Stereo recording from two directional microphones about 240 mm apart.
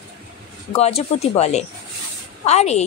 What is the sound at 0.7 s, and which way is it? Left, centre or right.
A woman's voice, left.